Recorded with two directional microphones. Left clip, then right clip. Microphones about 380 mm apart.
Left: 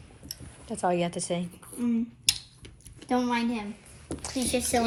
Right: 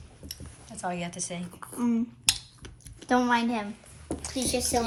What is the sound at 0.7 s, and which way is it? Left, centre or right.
Speech, centre.